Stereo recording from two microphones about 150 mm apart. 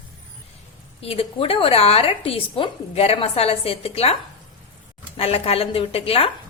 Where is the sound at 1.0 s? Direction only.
40° left (ahead or behind).